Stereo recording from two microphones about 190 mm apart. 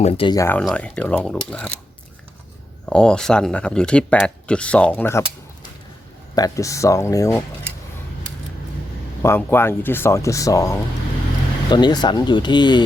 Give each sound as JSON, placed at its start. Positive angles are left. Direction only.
{"t": 0.0, "sound": "speech", "side_deg": 30}
{"t": 0.3, "sound": "speech", "side_deg": 15}
{"t": 2.9, "sound": "speech", "side_deg": 5}
{"t": 6.3, "sound": "speech", "side_deg": 20}
{"t": 9.2, "sound": "speech", "side_deg": 10}